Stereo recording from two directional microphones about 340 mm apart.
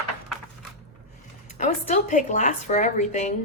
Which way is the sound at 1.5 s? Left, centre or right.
Left.